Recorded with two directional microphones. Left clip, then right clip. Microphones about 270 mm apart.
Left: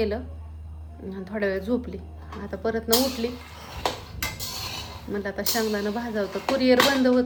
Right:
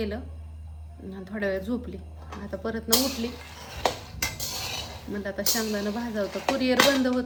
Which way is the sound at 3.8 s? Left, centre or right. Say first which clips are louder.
Right 1 dB; right.